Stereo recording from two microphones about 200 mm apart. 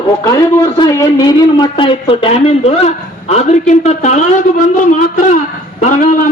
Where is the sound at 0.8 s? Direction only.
20° left (ahead or behind).